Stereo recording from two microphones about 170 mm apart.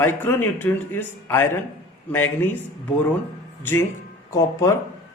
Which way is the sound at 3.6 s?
15° left (ahead or behind).